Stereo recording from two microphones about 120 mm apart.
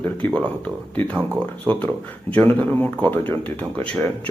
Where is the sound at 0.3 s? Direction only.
10° left (ahead or behind).